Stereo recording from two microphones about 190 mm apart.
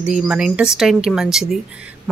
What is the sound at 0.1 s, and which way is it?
Speech, 5° right (ahead or behind).